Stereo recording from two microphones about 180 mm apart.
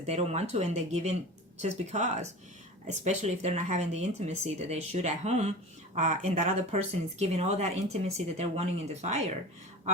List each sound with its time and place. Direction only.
0.0 s speech: 35° right (ahead or behind)